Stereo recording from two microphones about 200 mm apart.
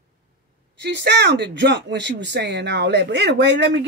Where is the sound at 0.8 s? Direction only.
60° right (ahead or behind).